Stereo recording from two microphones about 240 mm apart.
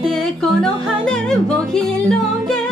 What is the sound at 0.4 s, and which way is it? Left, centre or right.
Music, centre.